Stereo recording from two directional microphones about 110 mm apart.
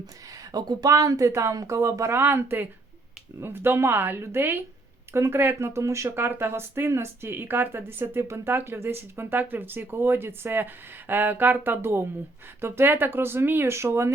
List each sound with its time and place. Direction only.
0.5 s speech: 35° right (ahead or behind)